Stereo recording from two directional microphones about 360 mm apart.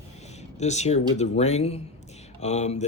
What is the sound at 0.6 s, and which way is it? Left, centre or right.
Speech, centre.